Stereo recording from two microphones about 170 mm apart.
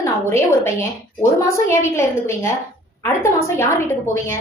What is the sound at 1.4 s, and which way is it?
A woman's voice, 15° left (ahead or behind).